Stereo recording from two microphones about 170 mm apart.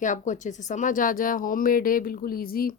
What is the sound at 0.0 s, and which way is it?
A woman's voice, 45° left (ahead or behind).